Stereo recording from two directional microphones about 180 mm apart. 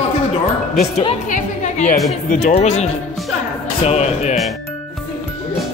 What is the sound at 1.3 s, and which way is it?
Music, 40° left (ahead or behind).